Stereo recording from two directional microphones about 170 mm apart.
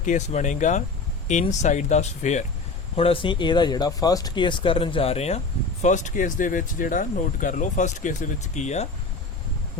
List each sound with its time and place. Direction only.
0.0 s speech: 45° left (ahead or behind)